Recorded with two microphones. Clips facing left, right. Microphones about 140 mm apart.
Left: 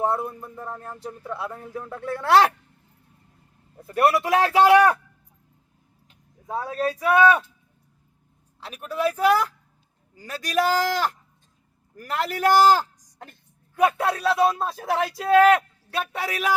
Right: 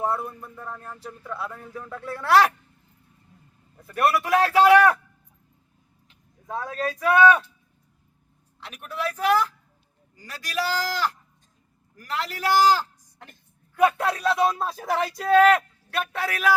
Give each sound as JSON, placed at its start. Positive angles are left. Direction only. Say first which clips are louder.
{"t": 0.0, "sound": "speech", "louder": "left 2 dB", "side_deg": 25}
{"t": 3.8, "sound": "speech", "louder": "left 2 dB", "side_deg": 30}
{"t": 6.5, "sound": "speech", "louder": "left 3 dB", "side_deg": 10}
{"t": 8.6, "sound": "a man's voice", "louder": "left 5 dB", "side_deg": 35}
{"t": 13.8, "sound": "speech", "louder": "even", "side_deg": 5}
{"t": 16.1, "sound": "speech", "louder": "right 1 dB", "side_deg": 15}